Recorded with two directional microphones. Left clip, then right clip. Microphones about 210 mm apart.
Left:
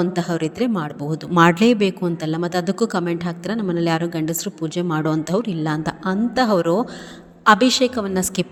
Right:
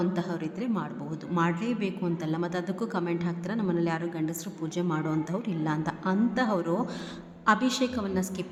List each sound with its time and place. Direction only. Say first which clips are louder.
0.0 s a woman's voice: left 9 dB; 30° left (ahead or behind)